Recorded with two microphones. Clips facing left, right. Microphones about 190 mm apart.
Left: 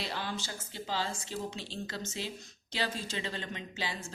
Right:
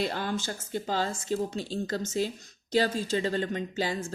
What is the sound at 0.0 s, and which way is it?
A woman's voice, 50° right (ahead or behind).